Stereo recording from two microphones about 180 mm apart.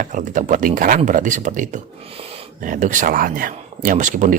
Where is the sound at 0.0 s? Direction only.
45° right (ahead or behind).